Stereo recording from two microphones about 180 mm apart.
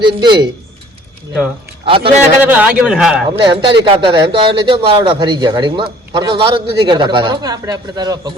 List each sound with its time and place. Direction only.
0.0 s a man's voice: 25° right (ahead or behind)
1.8 s a man's voice: 30° right (ahead or behind)
2.4 s a man's voice: 10° right (ahead or behind)
3.4 s a man's voice: 30° right (ahead or behind)